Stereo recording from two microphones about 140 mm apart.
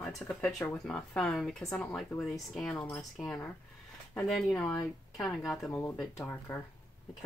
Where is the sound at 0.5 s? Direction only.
20° left (ahead or behind).